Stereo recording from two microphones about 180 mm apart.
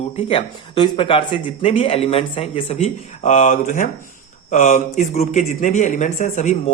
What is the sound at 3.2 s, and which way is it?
Speech, 45° left (ahead or behind).